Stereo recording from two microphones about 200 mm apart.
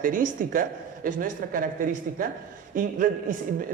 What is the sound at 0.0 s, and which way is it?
A man's voice, 40° right (ahead or behind).